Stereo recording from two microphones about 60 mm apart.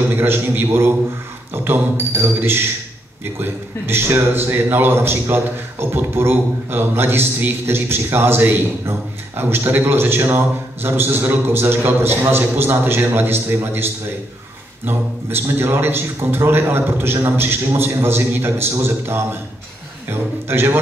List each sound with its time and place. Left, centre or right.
0.1 s a man's voice: right
14.9 s a man's voice: right